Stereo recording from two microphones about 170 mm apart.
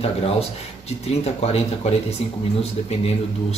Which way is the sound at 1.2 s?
40° left (ahead or behind).